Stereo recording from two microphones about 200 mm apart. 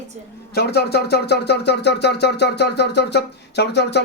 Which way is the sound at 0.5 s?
55° left (ahead or behind).